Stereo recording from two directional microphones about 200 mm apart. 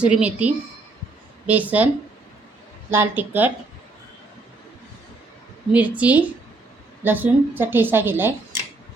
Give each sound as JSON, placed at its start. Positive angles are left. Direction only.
{"t": 0.0, "sound": "a woman's voice", "side_deg": -5}
{"t": 2.9, "sound": "a woman's voice", "side_deg": -10}
{"t": 5.7, "sound": "a woman's voice", "side_deg": -5}